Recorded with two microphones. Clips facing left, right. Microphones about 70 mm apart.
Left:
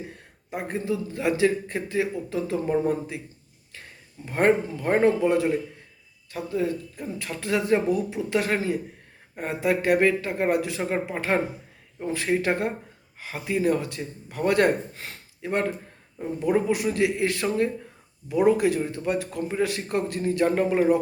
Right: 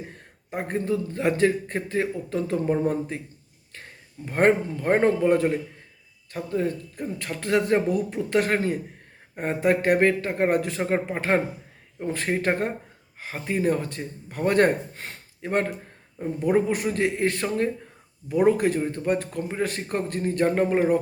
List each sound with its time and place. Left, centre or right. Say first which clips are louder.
0.5 s speech: right 2 dB; right
4.3 s speech: right 1 dB; right